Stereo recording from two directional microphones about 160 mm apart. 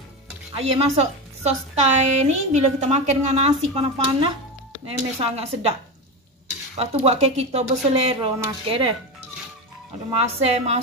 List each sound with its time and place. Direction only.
0.6 s a woman's voice: 40° right (ahead or behind)
6.8 s speech: 40° right (ahead or behind)
10.2 s a woman's voice: 45° right (ahead or behind)